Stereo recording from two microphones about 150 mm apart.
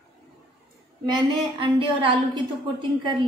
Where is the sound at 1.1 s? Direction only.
35° right (ahead or behind).